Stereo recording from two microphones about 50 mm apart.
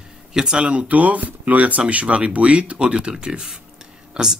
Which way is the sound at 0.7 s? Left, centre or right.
Right.